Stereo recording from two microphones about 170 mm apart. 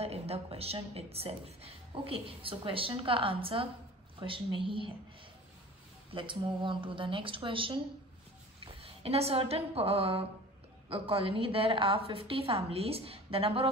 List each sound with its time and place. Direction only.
0.0 s a woman's voice: 35° right (ahead or behind)
6.1 s a woman's voice: 30° right (ahead or behind)